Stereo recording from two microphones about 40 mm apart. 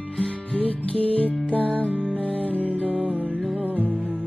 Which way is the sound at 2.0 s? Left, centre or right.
Left.